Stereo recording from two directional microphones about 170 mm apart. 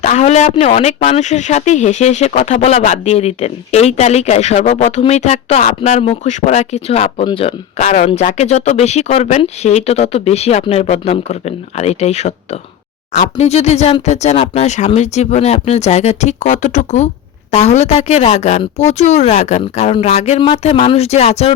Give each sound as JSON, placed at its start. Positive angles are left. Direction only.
{"t": 0.0, "sound": "speech", "side_deg": 45}